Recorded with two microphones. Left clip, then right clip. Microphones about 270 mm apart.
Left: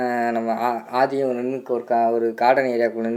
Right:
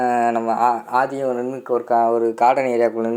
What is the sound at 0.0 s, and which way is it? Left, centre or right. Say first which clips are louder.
Speech: right 4 dB; centre.